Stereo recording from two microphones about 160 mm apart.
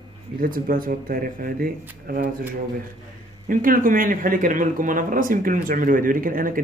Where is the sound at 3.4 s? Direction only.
60° right (ahead or behind).